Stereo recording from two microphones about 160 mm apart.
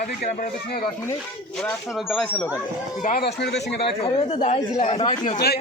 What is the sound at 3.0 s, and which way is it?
Speech, 55° left (ahead or behind).